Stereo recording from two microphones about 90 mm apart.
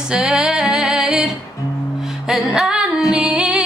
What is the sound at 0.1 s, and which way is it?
Female singing, 10° right (ahead or behind).